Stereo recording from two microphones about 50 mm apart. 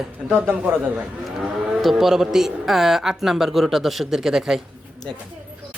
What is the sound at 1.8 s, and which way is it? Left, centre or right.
Speech, centre.